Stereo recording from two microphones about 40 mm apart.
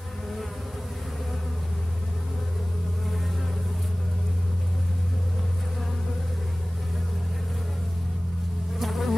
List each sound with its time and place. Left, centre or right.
8.7 s insect: centre